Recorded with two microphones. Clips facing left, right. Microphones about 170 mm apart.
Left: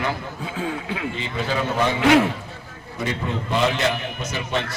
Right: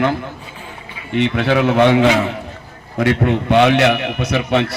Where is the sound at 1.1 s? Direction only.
70° right (ahead or behind).